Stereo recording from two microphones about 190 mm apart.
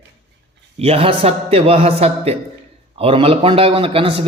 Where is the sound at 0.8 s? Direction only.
30° right (ahead or behind).